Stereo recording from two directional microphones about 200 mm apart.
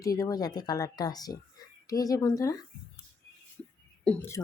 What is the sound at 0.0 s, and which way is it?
Speech, 15° left (ahead or behind).